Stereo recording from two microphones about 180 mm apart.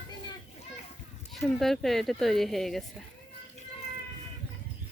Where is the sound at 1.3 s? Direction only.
Centre (ahead or behind).